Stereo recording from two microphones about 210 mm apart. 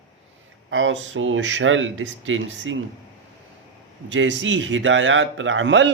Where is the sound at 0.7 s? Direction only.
65° right (ahead or behind).